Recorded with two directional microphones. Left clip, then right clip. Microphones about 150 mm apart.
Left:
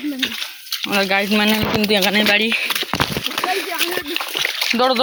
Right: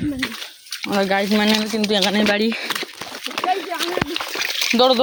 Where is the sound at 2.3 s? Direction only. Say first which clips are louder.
Left 4 dB; 40° right (ahead or behind).